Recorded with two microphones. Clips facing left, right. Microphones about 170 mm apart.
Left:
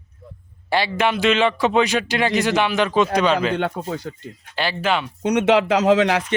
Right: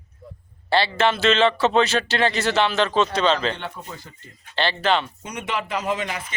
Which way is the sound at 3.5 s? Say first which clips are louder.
Left 11 dB; 55° left (ahead or behind).